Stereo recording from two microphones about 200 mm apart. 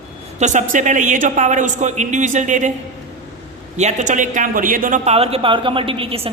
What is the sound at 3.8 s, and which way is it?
Speech, 35° right (ahead or behind).